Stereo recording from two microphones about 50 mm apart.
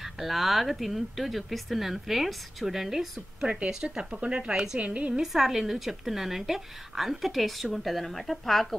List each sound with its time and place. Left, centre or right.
0.0 s a woman's voice: centre; by 5.2 s right
5.2 s speech: centre